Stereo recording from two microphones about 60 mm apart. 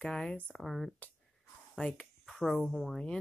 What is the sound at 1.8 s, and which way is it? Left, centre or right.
Speech, left.